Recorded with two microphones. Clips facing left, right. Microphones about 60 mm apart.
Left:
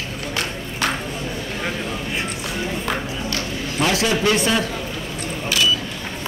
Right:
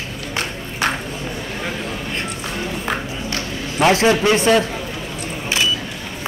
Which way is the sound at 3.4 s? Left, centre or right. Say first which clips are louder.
Right 5 dB; right.